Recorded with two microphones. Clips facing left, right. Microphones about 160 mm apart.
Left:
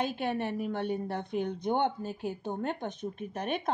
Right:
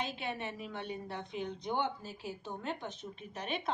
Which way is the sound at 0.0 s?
55° left (ahead or behind).